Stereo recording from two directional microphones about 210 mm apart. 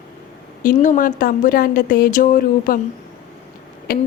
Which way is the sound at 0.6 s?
40° left (ahead or behind).